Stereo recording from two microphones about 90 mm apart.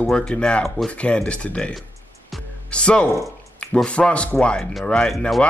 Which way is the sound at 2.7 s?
10° left (ahead or behind).